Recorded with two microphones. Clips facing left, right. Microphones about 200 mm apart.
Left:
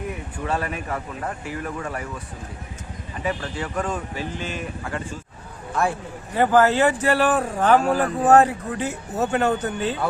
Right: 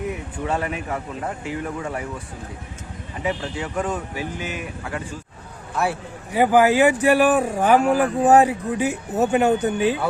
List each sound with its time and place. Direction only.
0.4 s speech: 15° right (ahead or behind)
3.2 s speech: 20° right (ahead or behind)